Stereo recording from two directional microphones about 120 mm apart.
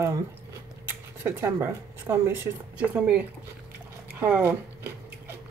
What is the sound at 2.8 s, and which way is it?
Speech, 10° right (ahead or behind).